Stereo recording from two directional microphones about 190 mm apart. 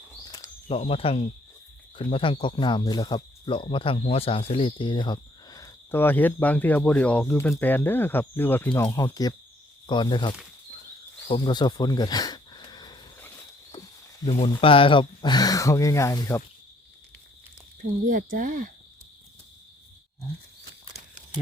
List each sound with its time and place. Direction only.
0.3 s a sound: 20° left (ahead or behind)
0.8 s speech: 30° left (ahead or behind)
11.3 s a sound: 25° left (ahead or behind)
13.7 s cricket: 25° left (ahead or behind)
14.3 s speech: 30° left (ahead or behind); by 16.4 s 15° left (ahead or behind)
17.7 s speech: 45° right (ahead or behind)